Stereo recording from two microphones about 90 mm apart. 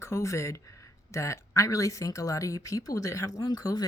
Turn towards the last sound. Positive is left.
turn(degrees=45)  # may be behind; listen again after turning